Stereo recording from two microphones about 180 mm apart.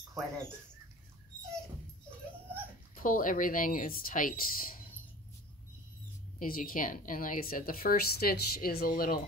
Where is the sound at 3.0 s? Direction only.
50° left (ahead or behind).